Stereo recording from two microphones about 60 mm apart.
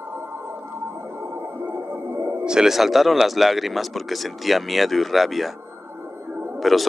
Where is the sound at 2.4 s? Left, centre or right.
Centre.